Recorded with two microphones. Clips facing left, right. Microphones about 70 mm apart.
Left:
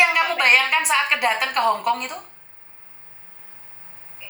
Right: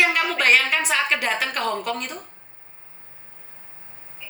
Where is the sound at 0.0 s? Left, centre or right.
Centre.